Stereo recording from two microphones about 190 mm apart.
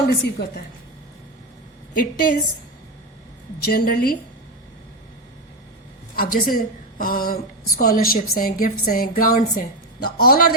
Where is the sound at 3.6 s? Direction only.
50° left (ahead or behind).